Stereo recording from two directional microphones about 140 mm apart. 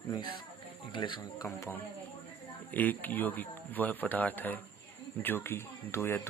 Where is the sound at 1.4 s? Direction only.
15° left (ahead or behind).